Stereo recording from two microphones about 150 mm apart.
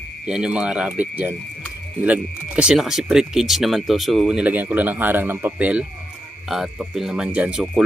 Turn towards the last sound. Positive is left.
turn(degrees=-5)  # may be behind; listen again after turning